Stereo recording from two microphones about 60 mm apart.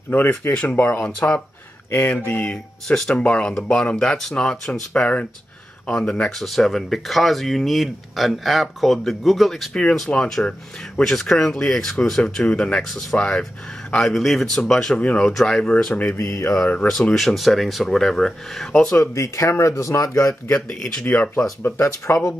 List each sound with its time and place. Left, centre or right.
0.1 s speech: left
1.0 s speech: centre
1.9 s speech: left
2.1 s speech: left
6.3 s speech: centre
16.2 s a sound: left
16.6 s speech: left
17.1 s speech: centre
19.1 s speech: left
21.0 s speech: left
21.6 s speech: left